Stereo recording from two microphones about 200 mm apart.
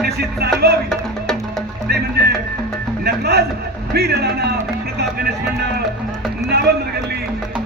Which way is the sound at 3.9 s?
55° right (ahead or behind).